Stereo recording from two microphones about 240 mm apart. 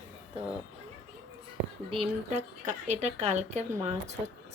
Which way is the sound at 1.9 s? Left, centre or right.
Right.